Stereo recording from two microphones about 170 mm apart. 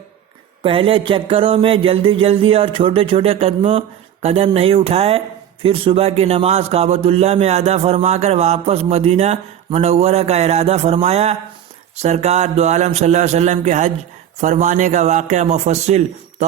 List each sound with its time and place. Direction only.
0.6 s a man's voice: 30° right (ahead or behind)